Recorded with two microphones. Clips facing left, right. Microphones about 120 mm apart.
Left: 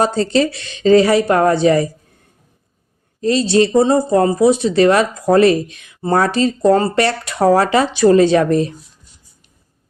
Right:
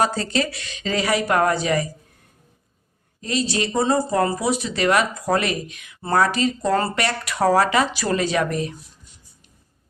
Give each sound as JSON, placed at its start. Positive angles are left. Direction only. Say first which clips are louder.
{"t": 0.0, "sound": "speech", "louder": "left 7 dB", "side_deg": 25}
{"t": 3.2, "sound": "speech", "louder": "left 10 dB", "side_deg": 30}